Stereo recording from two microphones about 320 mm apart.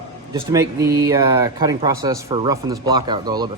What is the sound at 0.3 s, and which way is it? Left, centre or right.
Speech, centre.